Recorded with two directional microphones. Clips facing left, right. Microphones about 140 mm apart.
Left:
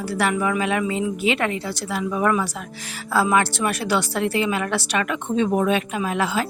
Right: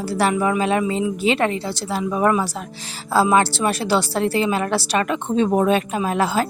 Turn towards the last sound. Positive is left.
turn(degrees=-40)  # may be behind; listen again after turning